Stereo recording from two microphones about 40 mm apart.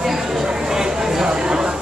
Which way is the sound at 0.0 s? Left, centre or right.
Centre.